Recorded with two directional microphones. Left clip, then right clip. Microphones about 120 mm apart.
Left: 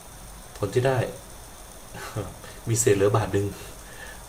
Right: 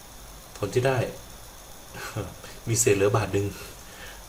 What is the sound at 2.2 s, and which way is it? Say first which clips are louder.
Speech: left 1 dB; centre (ahead or behind).